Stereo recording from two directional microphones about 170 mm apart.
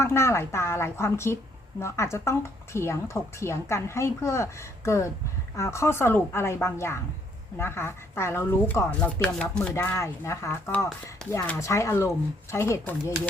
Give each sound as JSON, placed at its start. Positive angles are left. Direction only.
{"t": 0.0, "sound": "speech", "side_deg": 15}